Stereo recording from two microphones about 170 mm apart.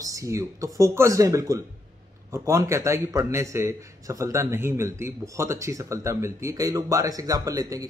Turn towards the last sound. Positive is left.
turn(degrees=-20)  # may be behind; listen again after turning